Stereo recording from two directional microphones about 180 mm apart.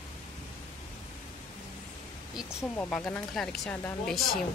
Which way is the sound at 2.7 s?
5° left (ahead or behind).